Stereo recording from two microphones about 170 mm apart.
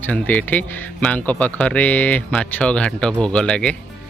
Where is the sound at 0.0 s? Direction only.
10° left (ahead or behind).